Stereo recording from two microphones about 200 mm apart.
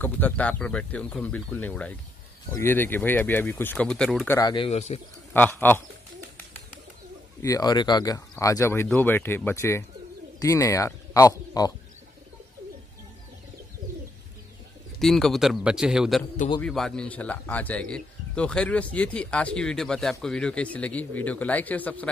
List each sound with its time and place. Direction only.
0.0 s speech: 10° left (ahead or behind)
4.4 s speech: 20° left (ahead or behind)
4.6 s speech: 30° left (ahead or behind)
5.3 s speech: 10° left (ahead or behind)
7.4 s speech: 20° left (ahead or behind)
15.0 s a man's voice: centre (ahead or behind)